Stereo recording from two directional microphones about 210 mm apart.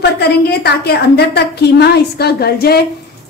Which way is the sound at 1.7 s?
50° left (ahead or behind).